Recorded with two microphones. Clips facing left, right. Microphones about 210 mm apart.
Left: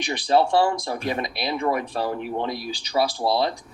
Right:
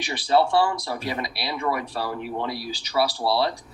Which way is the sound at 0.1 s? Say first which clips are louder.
Left 1 dB; 20° left (ahead or behind).